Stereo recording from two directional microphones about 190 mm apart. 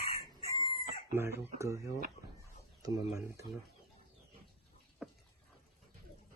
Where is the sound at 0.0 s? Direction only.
25° left (ahead or behind).